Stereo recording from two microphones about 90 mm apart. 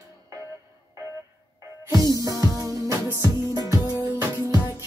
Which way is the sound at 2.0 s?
40° right (ahead or behind).